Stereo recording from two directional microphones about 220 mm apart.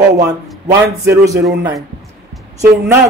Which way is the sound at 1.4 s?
50° right (ahead or behind).